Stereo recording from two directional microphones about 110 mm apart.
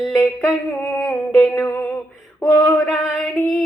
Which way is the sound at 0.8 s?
10° left (ahead or behind).